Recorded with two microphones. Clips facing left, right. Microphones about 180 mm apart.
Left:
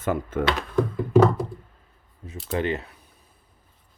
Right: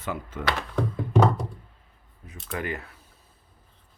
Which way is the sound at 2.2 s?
25° left (ahead or behind).